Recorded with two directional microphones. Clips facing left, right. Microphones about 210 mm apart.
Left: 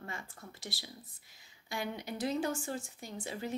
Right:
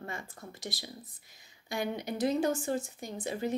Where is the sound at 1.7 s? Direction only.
20° right (ahead or behind).